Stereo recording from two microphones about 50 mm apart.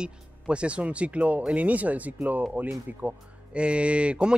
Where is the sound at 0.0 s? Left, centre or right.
Right.